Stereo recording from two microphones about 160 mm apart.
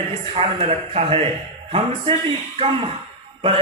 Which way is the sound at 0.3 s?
40° right (ahead or behind).